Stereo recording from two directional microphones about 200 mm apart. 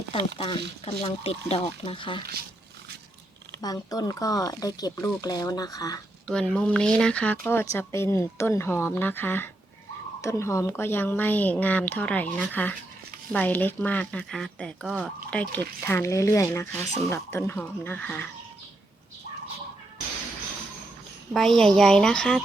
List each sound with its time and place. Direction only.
0.3 s speech: 25° left (ahead or behind)
3.6 s speech: 20° left (ahead or behind)
6.2 s speech: 5° left (ahead or behind)
21.3 s speech: centre (ahead or behind)